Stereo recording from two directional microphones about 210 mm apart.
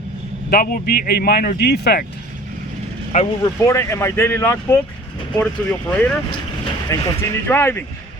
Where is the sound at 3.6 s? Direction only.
15° left (ahead or behind).